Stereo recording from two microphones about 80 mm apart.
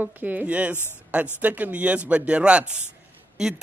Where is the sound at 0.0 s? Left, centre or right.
Right.